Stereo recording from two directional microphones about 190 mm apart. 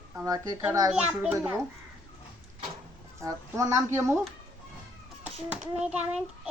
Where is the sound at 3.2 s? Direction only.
15° right (ahead or behind).